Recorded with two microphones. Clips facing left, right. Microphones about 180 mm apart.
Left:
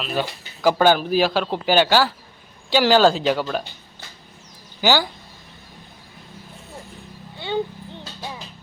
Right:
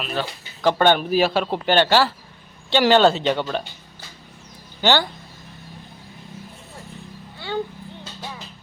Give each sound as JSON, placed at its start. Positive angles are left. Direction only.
{"t": 0.1, "sound": "speech", "side_deg": 5}
{"t": 4.8, "sound": "speech", "side_deg": 5}
{"t": 7.3, "sound": "a sound", "side_deg": 20}